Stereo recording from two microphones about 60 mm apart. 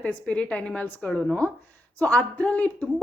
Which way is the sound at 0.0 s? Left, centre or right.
Left.